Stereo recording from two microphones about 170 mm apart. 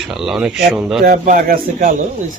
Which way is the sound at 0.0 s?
Centre (ahead or behind).